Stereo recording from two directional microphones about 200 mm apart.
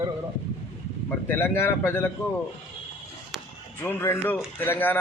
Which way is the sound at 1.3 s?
10° left (ahead or behind).